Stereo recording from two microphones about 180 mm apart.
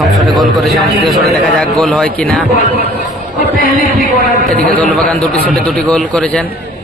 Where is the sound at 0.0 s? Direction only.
Centre (ahead or behind).